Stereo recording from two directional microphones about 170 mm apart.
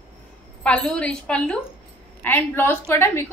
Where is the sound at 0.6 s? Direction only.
5° left (ahead or behind).